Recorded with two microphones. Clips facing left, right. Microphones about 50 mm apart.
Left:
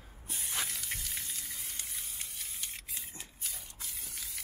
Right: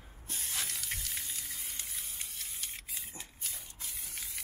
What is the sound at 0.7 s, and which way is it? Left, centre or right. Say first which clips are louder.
Steam: even; centre.